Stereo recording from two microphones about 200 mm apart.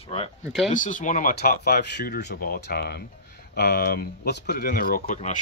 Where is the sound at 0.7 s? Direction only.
40° left (ahead or behind).